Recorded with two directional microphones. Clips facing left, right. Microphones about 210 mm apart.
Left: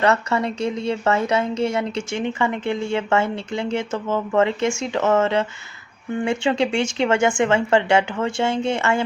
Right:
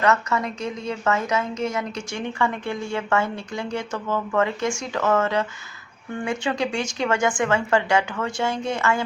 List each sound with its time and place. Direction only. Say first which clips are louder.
0.0 s a woman's voice: left 2 dB; 30° left (ahead or behind)